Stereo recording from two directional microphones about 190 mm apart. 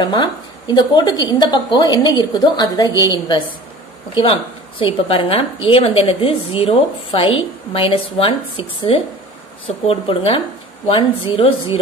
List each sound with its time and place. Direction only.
0.0 s a woman's voice: 25° left (ahead or behind)